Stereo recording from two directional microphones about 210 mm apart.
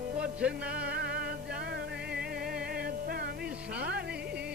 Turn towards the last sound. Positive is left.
turn(degrees=-50)  # may be behind; listen again after turning